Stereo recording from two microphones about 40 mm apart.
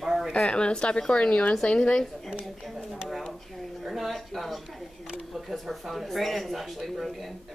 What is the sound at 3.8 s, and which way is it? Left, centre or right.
Speech, centre.